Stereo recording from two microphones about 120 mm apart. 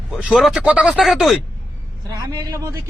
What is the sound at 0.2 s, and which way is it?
A man's voice, 5° right (ahead or behind).